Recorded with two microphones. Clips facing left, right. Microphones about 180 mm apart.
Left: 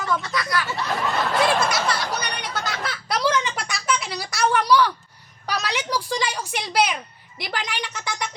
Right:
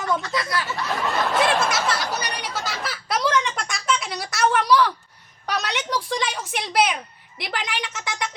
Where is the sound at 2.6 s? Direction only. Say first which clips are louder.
Left 1 dB; 5° right (ahead or behind).